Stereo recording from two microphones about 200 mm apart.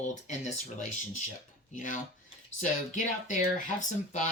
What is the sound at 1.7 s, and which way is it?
Speech, 40° left (ahead or behind).